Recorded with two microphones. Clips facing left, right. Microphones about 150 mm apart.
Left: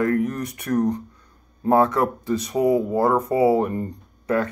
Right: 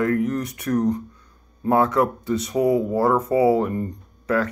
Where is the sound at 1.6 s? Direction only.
30° left (ahead or behind).